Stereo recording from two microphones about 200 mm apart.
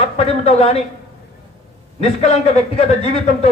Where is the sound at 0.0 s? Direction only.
30° left (ahead or behind).